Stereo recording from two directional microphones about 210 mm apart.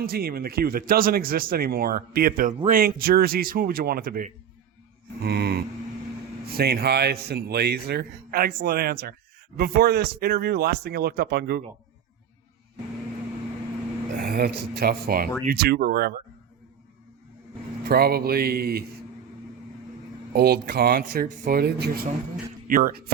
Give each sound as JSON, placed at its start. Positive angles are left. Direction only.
{"t": 0.0, "sound": "speech", "side_deg": -45}
{"t": 14.2, "sound": "a sound", "side_deg": -45}
{"t": 14.7, "sound": "speech", "side_deg": -45}
{"t": 17.8, "sound": "speech", "side_deg": -50}
{"t": 20.3, "sound": "speech", "side_deg": -45}